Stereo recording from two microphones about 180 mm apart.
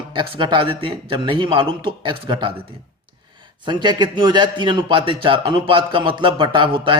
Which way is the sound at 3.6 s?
25° right (ahead or behind).